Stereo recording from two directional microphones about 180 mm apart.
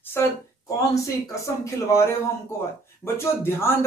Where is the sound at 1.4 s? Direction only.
15° left (ahead or behind).